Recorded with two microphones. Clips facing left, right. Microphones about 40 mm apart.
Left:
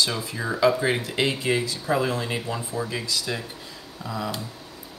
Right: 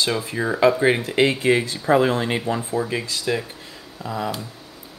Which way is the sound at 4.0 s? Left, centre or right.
Centre.